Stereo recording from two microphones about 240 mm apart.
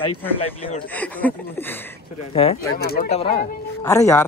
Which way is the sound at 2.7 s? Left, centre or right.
Left.